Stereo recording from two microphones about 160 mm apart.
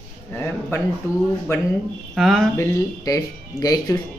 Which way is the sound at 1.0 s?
20° left (ahead or behind).